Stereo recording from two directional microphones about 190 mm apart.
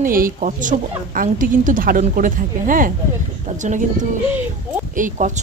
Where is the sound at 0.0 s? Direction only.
45° right (ahead or behind).